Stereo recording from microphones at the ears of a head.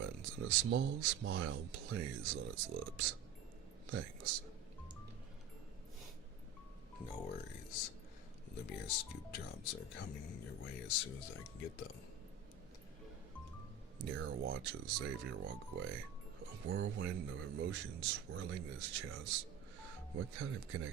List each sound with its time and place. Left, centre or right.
0.0 s speech: right
6.9 s speech: left
14.0 s speech: right